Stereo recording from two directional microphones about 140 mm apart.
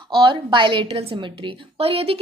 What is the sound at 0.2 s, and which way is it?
A woman's voice, 35° right (ahead or behind).